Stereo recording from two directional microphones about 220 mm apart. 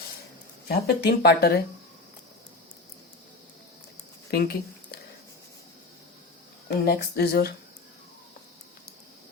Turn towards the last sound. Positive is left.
turn(degrees=45)  # may be behind; listen again after turning